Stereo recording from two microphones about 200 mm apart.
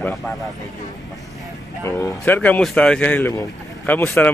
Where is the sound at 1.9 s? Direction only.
10° left (ahead or behind).